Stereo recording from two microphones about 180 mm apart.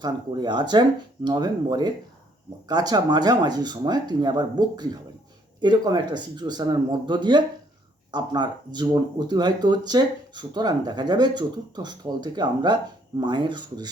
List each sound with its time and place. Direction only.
0.0 s speech: 25° right (ahead or behind)